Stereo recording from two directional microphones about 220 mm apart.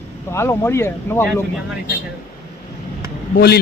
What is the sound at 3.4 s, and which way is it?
Speech, 45° left (ahead or behind).